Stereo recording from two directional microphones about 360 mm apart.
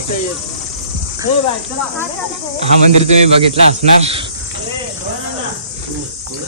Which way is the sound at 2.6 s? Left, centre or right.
Centre.